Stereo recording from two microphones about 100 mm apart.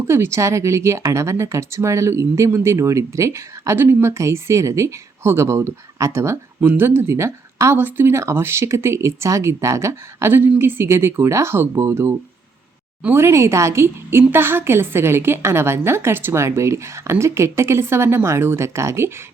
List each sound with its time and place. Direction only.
0.0 s speech: 25° right (ahead or behind)